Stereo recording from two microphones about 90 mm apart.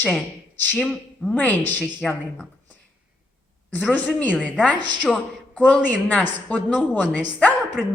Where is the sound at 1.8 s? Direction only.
Centre (ahead or behind).